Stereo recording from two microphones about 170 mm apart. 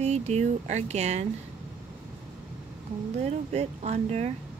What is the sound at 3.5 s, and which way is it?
Speech, 40° right (ahead or behind).